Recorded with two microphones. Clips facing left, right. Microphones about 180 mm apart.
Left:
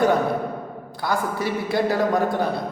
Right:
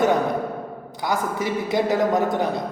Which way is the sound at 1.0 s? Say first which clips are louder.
Even; 20° right (ahead or behind).